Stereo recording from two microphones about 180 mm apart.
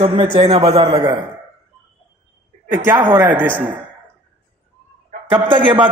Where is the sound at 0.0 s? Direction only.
30° right (ahead or behind).